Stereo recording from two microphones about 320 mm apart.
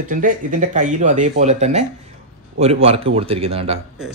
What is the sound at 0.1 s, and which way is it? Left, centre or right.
A man's voice, right.